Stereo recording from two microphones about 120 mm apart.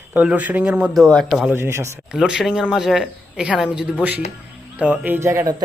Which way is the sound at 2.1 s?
5° right (ahead or behind).